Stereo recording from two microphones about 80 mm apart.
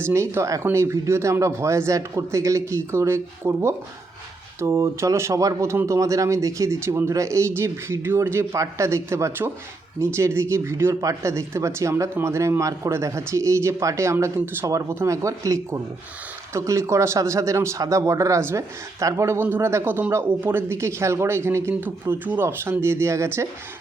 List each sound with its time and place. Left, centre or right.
0.0 s speech: right